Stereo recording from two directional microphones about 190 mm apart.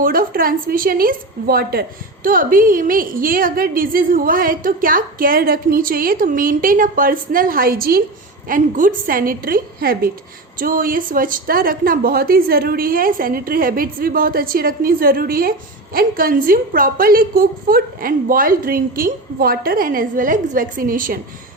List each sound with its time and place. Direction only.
0.0 s a woman's voice: 50° right (ahead or behind)